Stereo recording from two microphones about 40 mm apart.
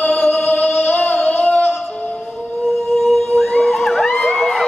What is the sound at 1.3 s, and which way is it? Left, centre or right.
Music, left.